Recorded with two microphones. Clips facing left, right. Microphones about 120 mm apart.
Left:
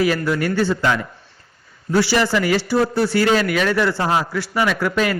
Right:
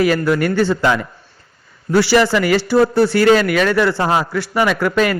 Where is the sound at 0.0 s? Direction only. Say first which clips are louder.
Right 4 dB; 55° right (ahead or behind).